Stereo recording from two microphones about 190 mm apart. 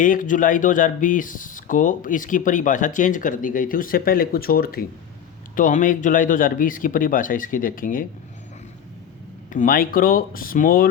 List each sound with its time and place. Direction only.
0.0 s speech: 45° left (ahead or behind)
9.5 s speech: 45° left (ahead or behind)